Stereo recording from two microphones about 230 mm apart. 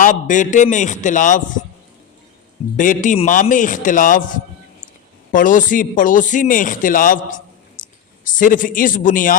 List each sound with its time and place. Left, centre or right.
0.0 s a man's voice: left
2.7 s a man's voice: left
5.3 s a man's voice: left